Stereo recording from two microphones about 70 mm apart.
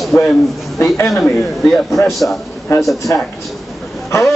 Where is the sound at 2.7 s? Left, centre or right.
Left.